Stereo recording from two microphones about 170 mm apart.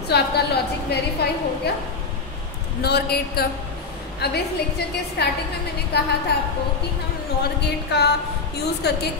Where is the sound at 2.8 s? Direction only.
70° left (ahead or behind).